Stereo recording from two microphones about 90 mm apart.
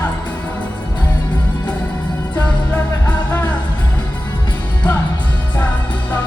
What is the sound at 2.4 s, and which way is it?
Music, 15° left (ahead or behind).